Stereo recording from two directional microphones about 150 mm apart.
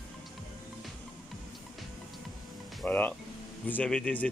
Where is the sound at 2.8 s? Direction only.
10° left (ahead or behind).